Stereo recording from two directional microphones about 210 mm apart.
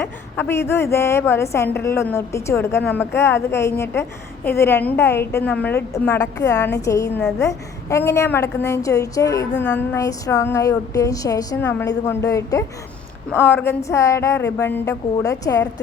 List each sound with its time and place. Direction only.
0.0 s a woman's voice: 10° left (ahead or behind)